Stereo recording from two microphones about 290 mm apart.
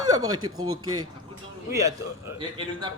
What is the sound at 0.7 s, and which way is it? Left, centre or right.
Speech, right.